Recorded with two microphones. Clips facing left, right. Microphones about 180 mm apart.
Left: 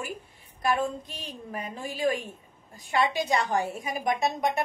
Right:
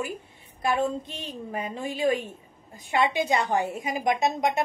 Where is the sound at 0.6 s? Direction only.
25° right (ahead or behind).